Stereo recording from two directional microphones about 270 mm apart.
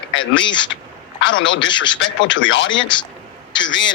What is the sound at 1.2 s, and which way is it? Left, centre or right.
A woman's voice, left.